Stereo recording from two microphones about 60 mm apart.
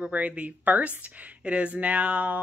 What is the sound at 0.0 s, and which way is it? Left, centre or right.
Speech, right.